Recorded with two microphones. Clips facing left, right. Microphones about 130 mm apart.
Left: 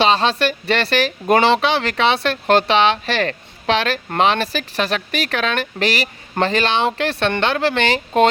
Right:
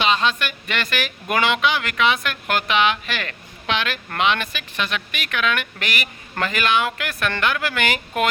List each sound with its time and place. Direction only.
0.0 s speech: 35° left (ahead or behind)